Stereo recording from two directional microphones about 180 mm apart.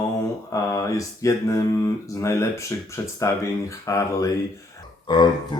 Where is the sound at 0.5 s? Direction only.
20° left (ahead or behind).